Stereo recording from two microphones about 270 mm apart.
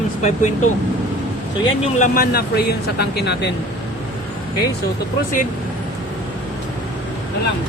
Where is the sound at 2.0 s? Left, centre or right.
Left.